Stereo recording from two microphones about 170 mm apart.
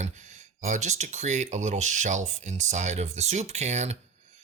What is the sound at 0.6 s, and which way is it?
Speech, 45° right (ahead or behind).